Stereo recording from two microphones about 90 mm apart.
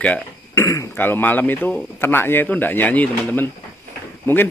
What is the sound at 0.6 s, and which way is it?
Speech, 35° left (ahead or behind).